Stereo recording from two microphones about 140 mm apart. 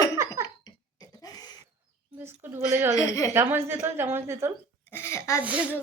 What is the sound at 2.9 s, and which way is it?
Speech, 25° left (ahead or behind).